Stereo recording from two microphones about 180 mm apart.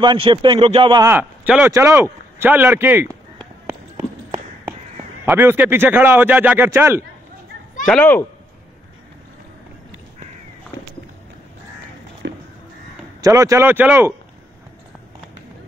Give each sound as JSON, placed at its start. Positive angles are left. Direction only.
{"t": 0.0, "sound": "a man's voice", "side_deg": -25}
{"t": 1.0, "sound": "a man's voice", "side_deg": -10}
{"t": 3.6, "sound": "run", "side_deg": -20}
{"t": 5.2, "sound": "a man's voice", "side_deg": -10}
{"t": 7.8, "sound": "a child's voice", "side_deg": 5}
{"t": 12.2, "sound": "a sound", "side_deg": -75}
{"t": 13.2, "sound": "a man's voice", "side_deg": -15}